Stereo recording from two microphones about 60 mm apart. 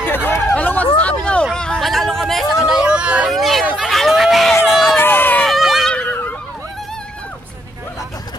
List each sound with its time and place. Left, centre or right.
0.0 s hubbub: left
0.6 s hubbub: left
1.4 s hubbub: centre
1.9 s chatter: centre
2.6 s hubbub: centre
3.3 s hubbub: centre
3.7 s crowd: centre
4.9 s run: left
5.5 s a sound: centre
5.9 s a sound: centre